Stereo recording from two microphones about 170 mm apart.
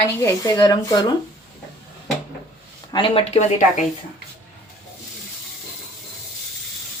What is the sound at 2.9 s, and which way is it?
Speech, 30° left (ahead or behind).